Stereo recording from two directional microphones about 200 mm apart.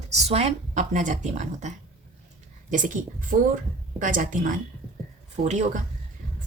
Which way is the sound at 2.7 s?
40° right (ahead or behind).